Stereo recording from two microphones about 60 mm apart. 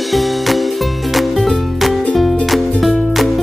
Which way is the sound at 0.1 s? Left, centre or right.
Centre.